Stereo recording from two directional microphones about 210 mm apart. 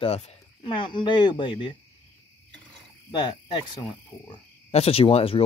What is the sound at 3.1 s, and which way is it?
Speech, 20° left (ahead or behind).